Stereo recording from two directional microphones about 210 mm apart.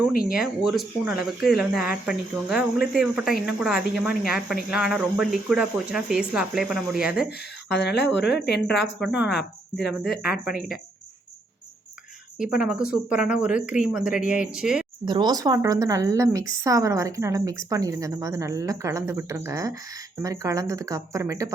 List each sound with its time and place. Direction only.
0.1 s speech: 45° left (ahead or behind)
0.3 s speech: centre (ahead or behind)
7.3 s speech: 50° left (ahead or behind)
9.0 s speech: 5° right (ahead or behind)
12.6 s speech: 5° right (ahead or behind)
15.0 s a woman's voice: 20° right (ahead or behind)